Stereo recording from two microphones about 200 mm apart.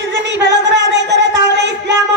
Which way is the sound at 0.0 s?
65° right (ahead or behind).